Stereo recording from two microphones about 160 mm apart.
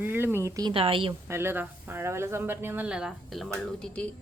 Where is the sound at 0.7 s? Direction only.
35° right (ahead or behind).